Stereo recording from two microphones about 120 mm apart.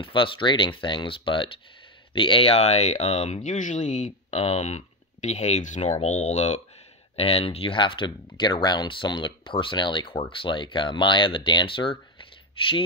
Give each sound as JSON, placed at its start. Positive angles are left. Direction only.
{"t": 0.0, "sound": "speech", "side_deg": 45}
{"t": 7.2, "sound": "speech", "side_deg": 50}